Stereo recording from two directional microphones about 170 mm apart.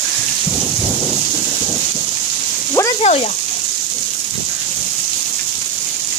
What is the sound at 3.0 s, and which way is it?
Speech, 40° left (ahead or behind).